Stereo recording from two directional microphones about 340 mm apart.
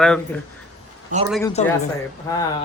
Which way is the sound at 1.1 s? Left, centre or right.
Right.